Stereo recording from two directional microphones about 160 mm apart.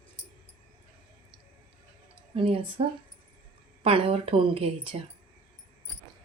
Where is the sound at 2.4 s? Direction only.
35° right (ahead or behind).